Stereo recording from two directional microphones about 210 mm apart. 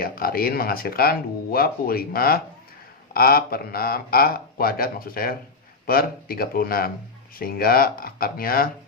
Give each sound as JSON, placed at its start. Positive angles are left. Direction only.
{"t": 0.0, "sound": "speech", "side_deg": 45}